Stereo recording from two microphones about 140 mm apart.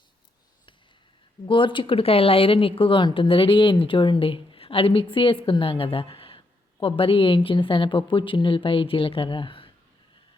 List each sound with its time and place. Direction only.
1.5 s speech: 35° left (ahead or behind)